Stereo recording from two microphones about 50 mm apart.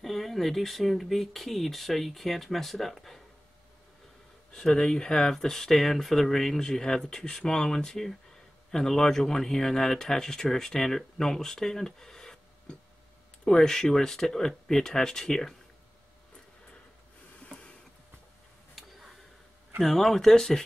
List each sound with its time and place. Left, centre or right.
0.0 s speech: centre
4.6 s speech: centre
17.4 s printer: left
19.8 s speech: centre